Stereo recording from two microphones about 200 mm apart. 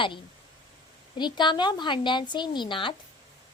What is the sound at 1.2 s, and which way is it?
A child's voice, 20° left (ahead or behind).